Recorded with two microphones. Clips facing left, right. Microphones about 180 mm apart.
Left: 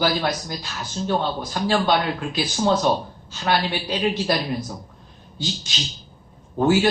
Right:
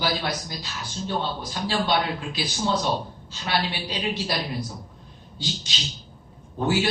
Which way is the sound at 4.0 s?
50° left (ahead or behind).